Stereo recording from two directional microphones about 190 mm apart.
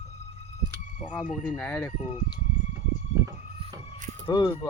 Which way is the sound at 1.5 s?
10° left (ahead or behind).